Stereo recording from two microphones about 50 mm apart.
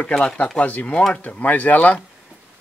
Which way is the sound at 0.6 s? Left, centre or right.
Left.